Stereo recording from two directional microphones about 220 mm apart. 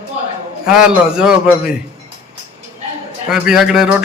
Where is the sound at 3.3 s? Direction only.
Centre (ahead or behind).